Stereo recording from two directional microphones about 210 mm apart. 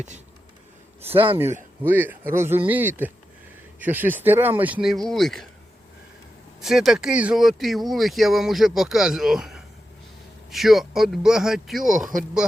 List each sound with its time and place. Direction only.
1.0 s speech: 25° right (ahead or behind)
1.8 s speech: 10° right (ahead or behind)
6.6 s speech: centre (ahead or behind)